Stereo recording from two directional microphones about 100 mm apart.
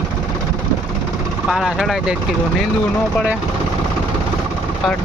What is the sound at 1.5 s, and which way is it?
Speech, 5° right (ahead or behind).